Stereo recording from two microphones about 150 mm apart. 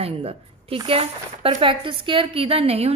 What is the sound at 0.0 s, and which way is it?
A woman's voice, 40° right (ahead or behind).